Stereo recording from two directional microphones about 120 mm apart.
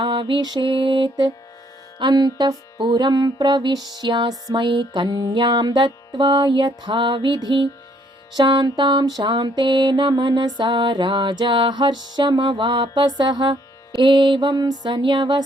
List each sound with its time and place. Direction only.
0.0 s mantra: 45° right (ahead or behind)
2.0 s music: 40° right (ahead or behind)